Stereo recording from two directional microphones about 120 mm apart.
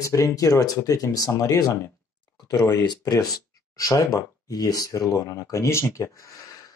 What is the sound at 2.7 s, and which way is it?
Speech, 35° left (ahead or behind).